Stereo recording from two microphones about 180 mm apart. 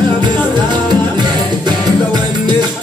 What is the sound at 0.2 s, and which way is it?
Music, 25° right (ahead or behind).